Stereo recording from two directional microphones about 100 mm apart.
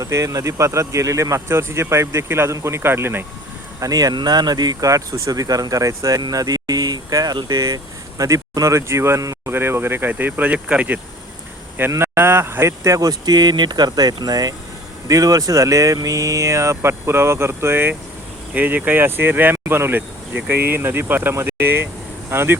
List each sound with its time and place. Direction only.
0.0 s speech: 30° right (ahead or behind)
3.8 s speech: 35° right (ahead or behind); by 11.0 s 15° right (ahead or behind)
11.9 s speech: 25° right (ahead or behind)